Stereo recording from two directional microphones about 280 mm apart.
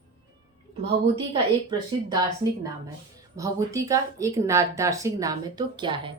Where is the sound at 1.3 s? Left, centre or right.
Centre.